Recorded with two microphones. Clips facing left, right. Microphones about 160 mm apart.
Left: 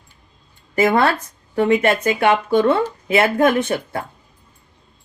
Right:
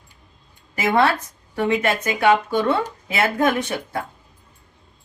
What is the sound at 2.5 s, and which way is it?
Speech, 50° left (ahead or behind).